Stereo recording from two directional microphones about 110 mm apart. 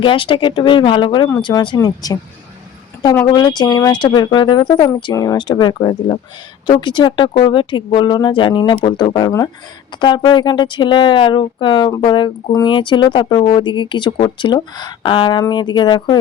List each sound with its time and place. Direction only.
0.0 s speech: 50° left (ahead or behind); by 2.1 s 35° left (ahead or behind)
3.3 s speech: 40° left (ahead or behind)